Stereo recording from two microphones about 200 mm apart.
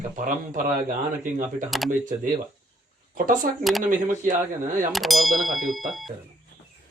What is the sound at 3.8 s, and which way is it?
Speech, 40° right (ahead or behind).